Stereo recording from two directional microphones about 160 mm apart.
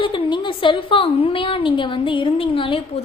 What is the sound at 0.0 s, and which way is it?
A woman's voice, 30° left (ahead or behind).